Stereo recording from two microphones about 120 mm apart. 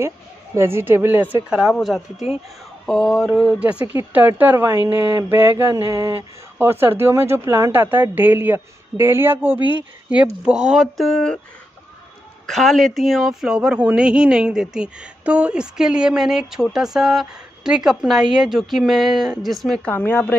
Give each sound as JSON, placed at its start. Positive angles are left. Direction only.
{"t": 0.6, "sound": "speech", "side_deg": -20}
{"t": 1.6, "sound": "speech", "side_deg": 0}
{"t": 9.6, "sound": "speech", "side_deg": 40}
{"t": 10.4, "sound": "speech", "side_deg": -5}
{"t": 12.4, "sound": "speech", "side_deg": 0}
{"t": 19.9, "sound": "speech", "side_deg": 15}